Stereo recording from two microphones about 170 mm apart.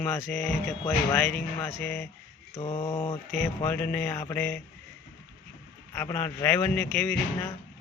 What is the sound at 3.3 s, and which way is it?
Speech, 5° left (ahead or behind).